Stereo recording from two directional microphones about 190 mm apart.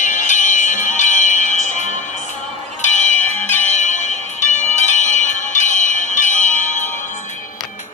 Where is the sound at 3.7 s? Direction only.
40° left (ahead or behind).